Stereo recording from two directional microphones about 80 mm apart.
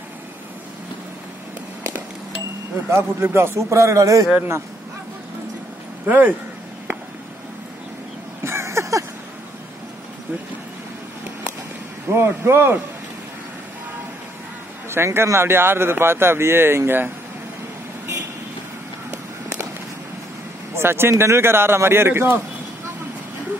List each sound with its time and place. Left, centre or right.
2.9 s speech: right
4.4 s speech: right
6.0 s speech: right
8.5 s a sound: right
12.1 s speech: right
14.9 s speech: right
20.7 s speech: right